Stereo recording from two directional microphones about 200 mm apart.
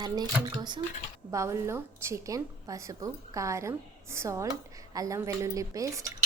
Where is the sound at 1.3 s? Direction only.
15° right (ahead or behind).